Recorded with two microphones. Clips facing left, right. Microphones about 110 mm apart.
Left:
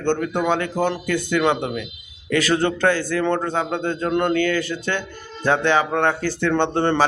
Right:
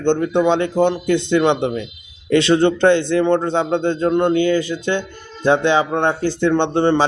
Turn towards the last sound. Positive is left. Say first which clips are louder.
# right 4 dB
turn(degrees=-15)  # may be behind; listen again after turning